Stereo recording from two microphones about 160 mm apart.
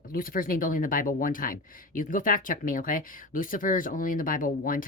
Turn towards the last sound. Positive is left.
turn(degrees=60)  # may be behind; listen again after turning